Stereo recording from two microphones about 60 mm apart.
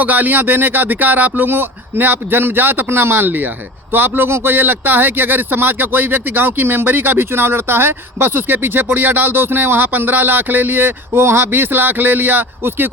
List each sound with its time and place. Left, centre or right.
0.0 s a man's voice: right